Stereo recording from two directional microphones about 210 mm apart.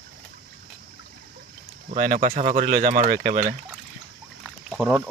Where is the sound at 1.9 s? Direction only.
40° right (ahead or behind).